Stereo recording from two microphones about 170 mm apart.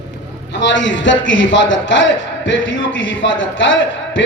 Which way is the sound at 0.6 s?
90° left.